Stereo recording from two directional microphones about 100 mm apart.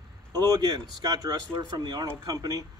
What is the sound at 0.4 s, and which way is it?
A man's voice, 40° right (ahead or behind).